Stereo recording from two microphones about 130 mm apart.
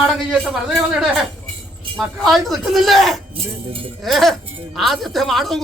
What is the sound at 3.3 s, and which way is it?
Speech, 45° right (ahead or behind).